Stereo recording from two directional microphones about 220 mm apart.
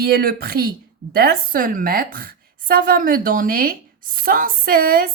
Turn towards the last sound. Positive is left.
turn(degrees=-40)  # may be behind; listen again after turning